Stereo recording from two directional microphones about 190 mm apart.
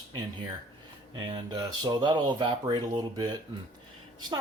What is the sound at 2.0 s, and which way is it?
Speech, 25° right (ahead or behind).